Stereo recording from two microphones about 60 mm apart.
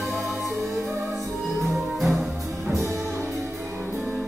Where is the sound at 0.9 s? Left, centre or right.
Right.